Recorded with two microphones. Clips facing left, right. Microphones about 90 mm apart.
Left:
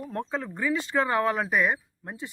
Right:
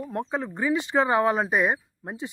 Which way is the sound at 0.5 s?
20° right (ahead or behind).